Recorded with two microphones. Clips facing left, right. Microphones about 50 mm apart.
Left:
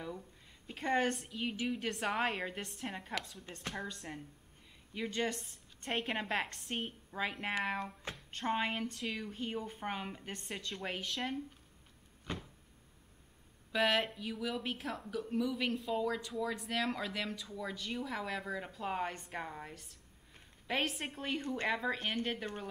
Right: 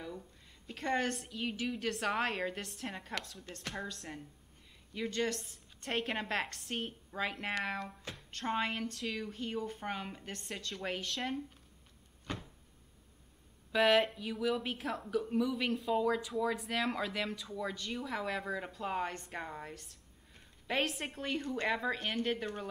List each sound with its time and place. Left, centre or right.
0.7 s a woman's voice: centre
13.7 s speech: centre